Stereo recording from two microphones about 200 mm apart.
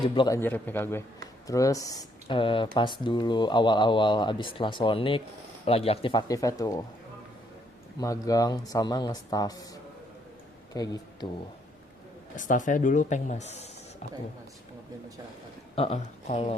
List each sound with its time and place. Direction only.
0.1 s speech: 20° left (ahead or behind)
0.3 s speech: 10° left (ahead or behind)
7.9 s speech: 15° left (ahead or behind)
10.8 s speech: 20° left (ahead or behind)
12.4 s speech: 40° left (ahead or behind)
15.7 s speech: 30° left (ahead or behind)